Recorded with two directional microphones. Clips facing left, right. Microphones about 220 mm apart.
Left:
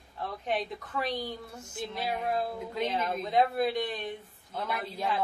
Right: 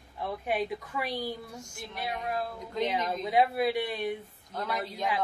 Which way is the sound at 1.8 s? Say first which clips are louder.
Left 4 dB; 20° left (ahead or behind).